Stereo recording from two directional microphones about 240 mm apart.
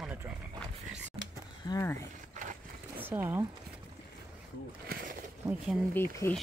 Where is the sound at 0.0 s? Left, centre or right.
Centre.